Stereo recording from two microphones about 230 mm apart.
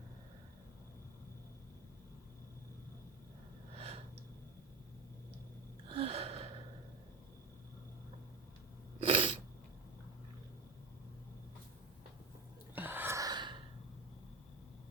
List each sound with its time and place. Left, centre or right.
3.8 s a sound: right
5.9 s gasp: right
9.0 s sneeze: right
12.7 s gasp: centre